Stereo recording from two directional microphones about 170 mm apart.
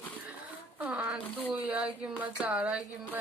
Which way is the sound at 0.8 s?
10° right (ahead or behind).